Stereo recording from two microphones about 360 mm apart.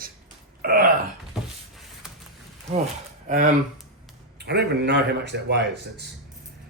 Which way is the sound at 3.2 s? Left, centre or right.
Right.